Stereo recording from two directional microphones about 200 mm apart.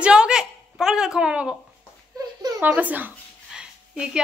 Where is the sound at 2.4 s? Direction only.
20° right (ahead or behind).